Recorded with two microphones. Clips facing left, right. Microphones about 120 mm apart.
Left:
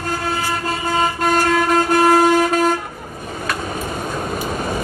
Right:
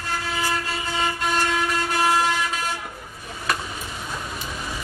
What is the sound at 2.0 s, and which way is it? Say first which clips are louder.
Train: left 8 dB; 50° left (ahead or behind).